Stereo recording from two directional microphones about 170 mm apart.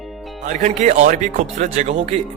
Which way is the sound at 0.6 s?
45° right (ahead or behind).